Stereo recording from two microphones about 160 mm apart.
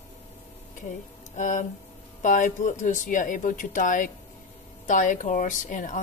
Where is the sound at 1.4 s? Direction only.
50° left (ahead or behind).